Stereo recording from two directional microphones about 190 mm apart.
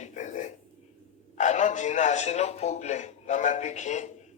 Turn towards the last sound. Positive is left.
turn(degrees=40)  # may be behind; listen again after turning